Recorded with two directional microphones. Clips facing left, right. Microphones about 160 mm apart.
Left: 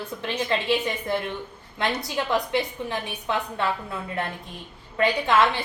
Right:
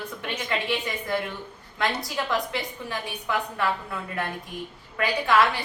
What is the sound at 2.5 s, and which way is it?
A woman's voice, 25° left (ahead or behind).